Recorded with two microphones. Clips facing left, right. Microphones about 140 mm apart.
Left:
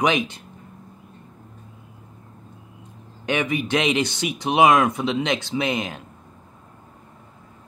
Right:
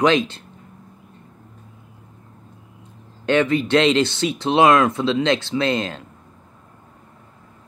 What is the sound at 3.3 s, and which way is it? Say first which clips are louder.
Speech: right 6 dB; 15° left (ahead or behind).